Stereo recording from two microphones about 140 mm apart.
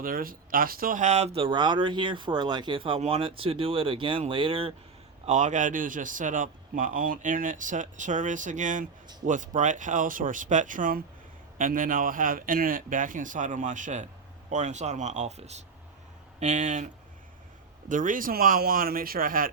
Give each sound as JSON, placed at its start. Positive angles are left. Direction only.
{"t": 0.0, "sound": "speech", "side_deg": -90}
{"t": 5.2, "sound": "a man's voice", "side_deg": -55}